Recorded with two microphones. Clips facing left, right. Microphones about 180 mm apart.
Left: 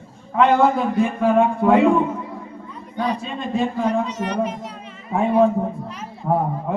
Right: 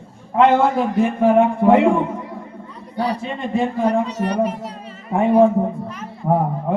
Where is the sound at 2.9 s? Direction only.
35° right (ahead or behind).